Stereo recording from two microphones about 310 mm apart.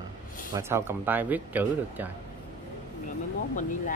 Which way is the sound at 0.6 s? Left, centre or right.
Centre.